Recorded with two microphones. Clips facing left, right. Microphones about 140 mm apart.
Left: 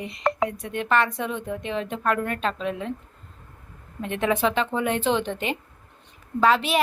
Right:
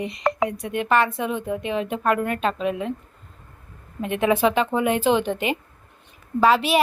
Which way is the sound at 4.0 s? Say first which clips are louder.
Right 3 dB; 10° right (ahead or behind).